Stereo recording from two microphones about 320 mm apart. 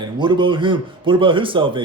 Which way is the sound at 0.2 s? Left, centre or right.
Centre.